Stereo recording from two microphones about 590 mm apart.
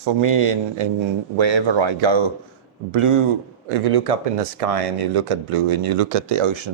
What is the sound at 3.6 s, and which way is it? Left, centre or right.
Speech, right.